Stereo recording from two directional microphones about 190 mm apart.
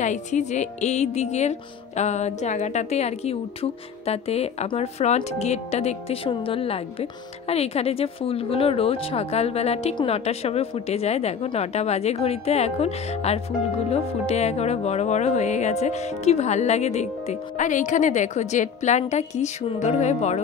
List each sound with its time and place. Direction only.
0.0 s speech: 40° left (ahead or behind)